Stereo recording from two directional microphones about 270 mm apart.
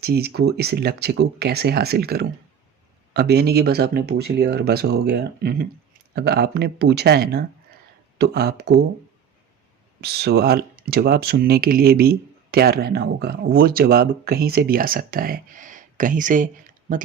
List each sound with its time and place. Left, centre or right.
0.0 s speech: right
10.0 s speech: right